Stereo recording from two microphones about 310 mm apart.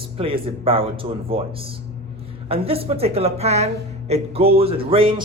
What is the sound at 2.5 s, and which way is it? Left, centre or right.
Speech, centre.